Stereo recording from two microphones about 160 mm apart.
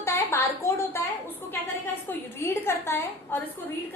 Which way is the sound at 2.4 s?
15° left (ahead or behind).